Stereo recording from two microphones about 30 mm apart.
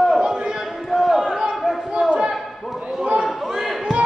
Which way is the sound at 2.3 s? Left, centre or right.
Centre.